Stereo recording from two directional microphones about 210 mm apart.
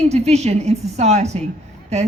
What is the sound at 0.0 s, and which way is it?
A woman's voice, 30° right (ahead or behind).